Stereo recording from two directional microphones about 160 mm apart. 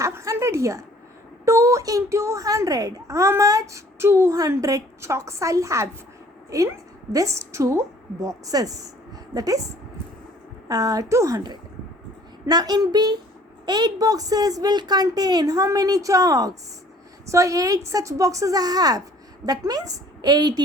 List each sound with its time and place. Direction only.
0.0 s a sound: 20° right (ahead or behind)
1.5 s a child's voice: 20° right (ahead or behind)
10.7 s a child's voice: 25° right (ahead or behind)